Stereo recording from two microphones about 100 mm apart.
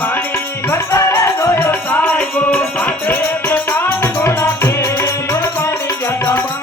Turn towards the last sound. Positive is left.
turn(degrees=30)  # may be behind; listen again after turning